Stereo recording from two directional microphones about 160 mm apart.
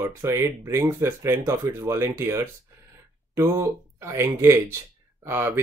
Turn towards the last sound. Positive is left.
turn(degrees=-15)  # may be behind; listen again after turning